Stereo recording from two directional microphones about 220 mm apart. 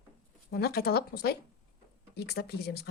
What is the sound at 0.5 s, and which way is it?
Speech, 45° left (ahead or behind).